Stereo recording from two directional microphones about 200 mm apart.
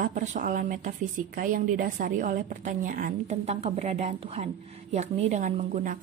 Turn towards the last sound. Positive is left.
turn(degrees=-35)  # may be behind; listen again after turning